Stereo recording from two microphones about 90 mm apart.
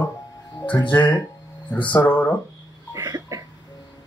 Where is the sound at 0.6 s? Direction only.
60° left (ahead or behind).